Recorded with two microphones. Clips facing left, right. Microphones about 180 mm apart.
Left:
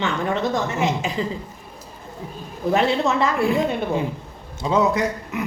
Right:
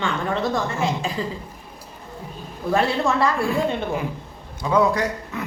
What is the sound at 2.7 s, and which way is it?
A woman's voice, 20° left (ahead or behind).